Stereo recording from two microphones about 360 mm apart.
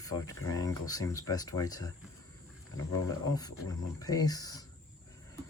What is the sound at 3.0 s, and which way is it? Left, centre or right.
Speech, centre.